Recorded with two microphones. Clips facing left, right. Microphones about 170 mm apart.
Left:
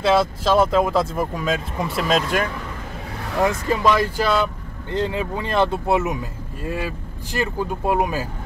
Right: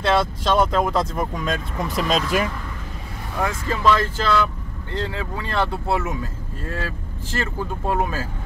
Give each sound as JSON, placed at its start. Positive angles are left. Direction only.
{"t": 0.0, "sound": "speech", "side_deg": 0}
{"t": 3.4, "sound": "speech", "side_deg": 15}